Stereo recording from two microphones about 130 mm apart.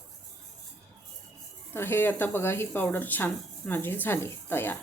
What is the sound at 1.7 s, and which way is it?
Speech, 15° left (ahead or behind).